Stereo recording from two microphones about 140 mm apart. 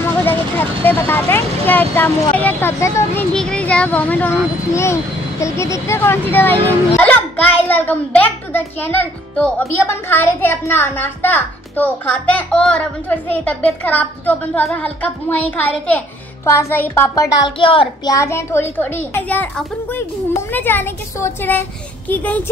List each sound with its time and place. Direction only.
0.0 s a child's voice: 15° left (ahead or behind)
3.3 s a child's voice: 5° left (ahead or behind)
5.4 s a child's voice: 20° left (ahead or behind)
16.4 s music: 15° left (ahead or behind)
17.6 s a child's voice: 40° left (ahead or behind)
18.0 s a child's voice: 25° left (ahead or behind)